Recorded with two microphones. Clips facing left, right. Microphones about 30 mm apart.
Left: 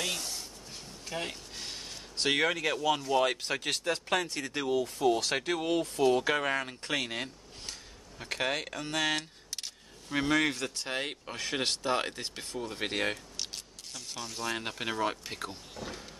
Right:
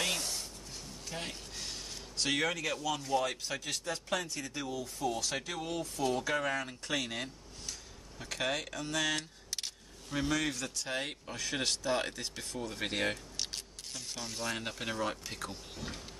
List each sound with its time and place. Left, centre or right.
0.0 s a sound: centre
1.0 s speech: centre
1.5 s a sound: left
3.2 s speech: left
10.9 s speech: left
12.5 s speech: centre
13.9 s speech: centre
15.8 s speech: centre